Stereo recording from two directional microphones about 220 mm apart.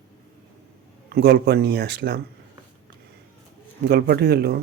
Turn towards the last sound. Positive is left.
turn(degrees=-45)  # may be behind; listen again after turning